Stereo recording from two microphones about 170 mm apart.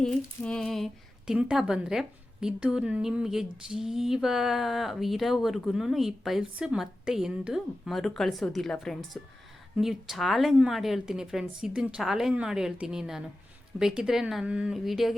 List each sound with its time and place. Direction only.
0.0 s a woman's voice: 5° left (ahead or behind)